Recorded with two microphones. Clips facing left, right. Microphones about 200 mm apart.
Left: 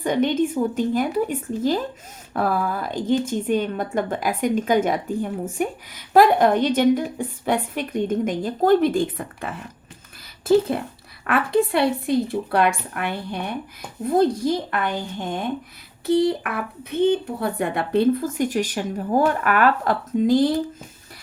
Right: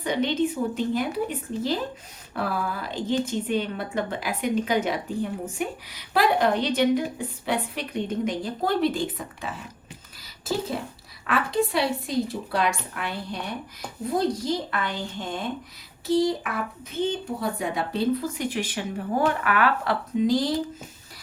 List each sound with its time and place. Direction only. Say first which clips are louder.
0.0 s a woman's voice: left 4 dB; 50° left (ahead or behind)